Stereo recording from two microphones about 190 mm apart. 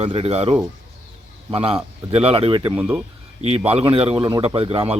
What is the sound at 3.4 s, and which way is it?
Speech, 35° right (ahead or behind).